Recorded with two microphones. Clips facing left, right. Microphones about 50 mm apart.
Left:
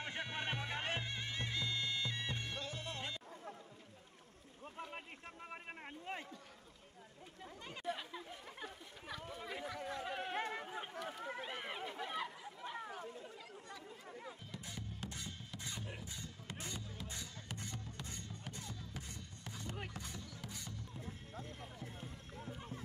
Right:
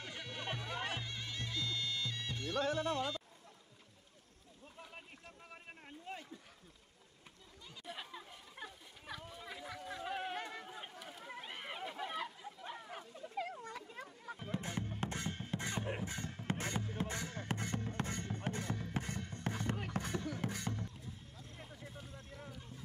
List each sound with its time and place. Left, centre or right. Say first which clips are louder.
0.0 s bagpipes: left 3 dB; left
2.6 s music: right 10 dB; right
5.5 s a sound: left 4 dB; left
7.8 s chatter: left 4 dB; centre
9.2 s a sound: left 3 dB; centre
10.0 s chatter: right 6 dB; centre
10.3 s chatter: left 3 dB; centre
11.1 s a sound: left 3 dB; centre
13.4 s chatter: right 9 dB; right
14.4 s music: right 8 dB; right
21.0 s music: left 4 dB; left